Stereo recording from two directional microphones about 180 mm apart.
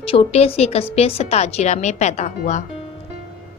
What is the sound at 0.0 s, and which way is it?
A woman's voice, 35° left (ahead or behind).